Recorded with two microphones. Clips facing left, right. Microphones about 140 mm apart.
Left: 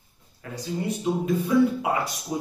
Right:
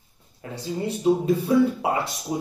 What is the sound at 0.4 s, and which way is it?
Speech, 30° right (ahead or behind).